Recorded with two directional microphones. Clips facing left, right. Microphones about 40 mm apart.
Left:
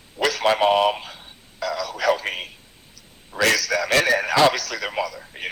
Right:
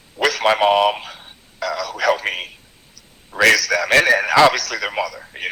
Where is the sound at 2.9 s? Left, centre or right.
Right.